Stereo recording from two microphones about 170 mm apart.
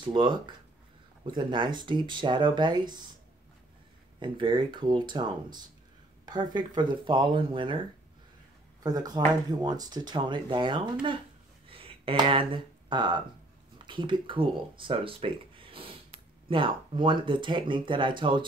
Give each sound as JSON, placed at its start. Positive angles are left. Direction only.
{"t": 0.0, "sound": "speech", "side_deg": -30}
{"t": 4.2, "sound": "speech", "side_deg": -30}
{"t": 8.8, "sound": "speech", "side_deg": -25}
{"t": 11.7, "sound": "a sound", "side_deg": -30}
{"t": 12.9, "sound": "speech", "side_deg": -25}